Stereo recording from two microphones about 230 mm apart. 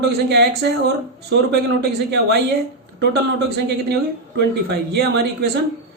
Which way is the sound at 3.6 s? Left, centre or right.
Right.